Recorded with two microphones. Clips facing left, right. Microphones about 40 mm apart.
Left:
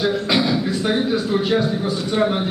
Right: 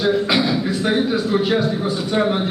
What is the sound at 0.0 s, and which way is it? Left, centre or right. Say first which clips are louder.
A man's voice: right 1 dB; centre.